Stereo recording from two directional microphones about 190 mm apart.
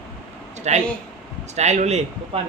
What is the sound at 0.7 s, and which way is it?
Speech, 35° right (ahead or behind).